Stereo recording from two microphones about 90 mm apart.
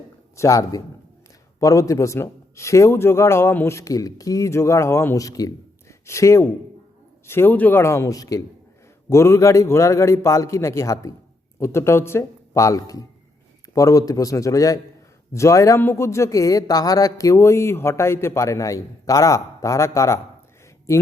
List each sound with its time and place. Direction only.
0.3 s a man's voice: 35° left (ahead or behind); by 7.8 s 20° left (ahead or behind)
7.8 s speech: 30° left (ahead or behind)
9.0 s speech: 30° left (ahead or behind)